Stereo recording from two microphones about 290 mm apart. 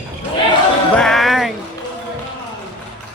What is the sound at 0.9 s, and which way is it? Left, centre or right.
Music, centre.